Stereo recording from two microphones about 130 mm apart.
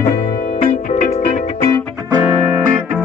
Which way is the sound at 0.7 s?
70° left (ahead or behind).